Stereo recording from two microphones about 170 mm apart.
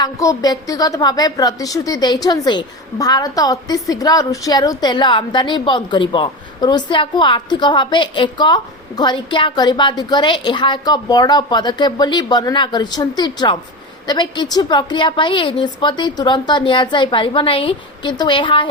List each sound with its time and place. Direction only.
0.0 s a woman's voice: 20° left (ahead or behind)